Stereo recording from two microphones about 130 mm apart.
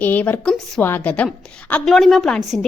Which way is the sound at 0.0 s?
15° left (ahead or behind).